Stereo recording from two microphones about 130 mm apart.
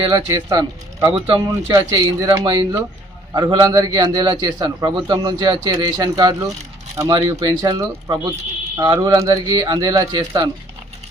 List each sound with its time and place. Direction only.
0.1 s a man's voice: 30° right (ahead or behind)